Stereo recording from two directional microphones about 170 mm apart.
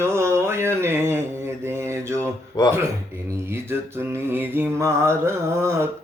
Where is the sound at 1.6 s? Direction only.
15° right (ahead or behind).